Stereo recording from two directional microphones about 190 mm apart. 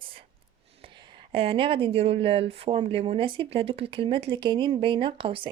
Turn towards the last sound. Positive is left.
turn(degrees=-30)  # may be behind; listen again after turning